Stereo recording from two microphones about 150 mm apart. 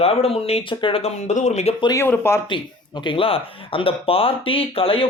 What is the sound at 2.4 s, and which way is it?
Speech, 30° left (ahead or behind).